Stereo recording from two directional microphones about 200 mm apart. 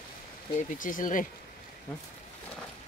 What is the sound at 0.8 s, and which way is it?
Speech, 40° left (ahead or behind).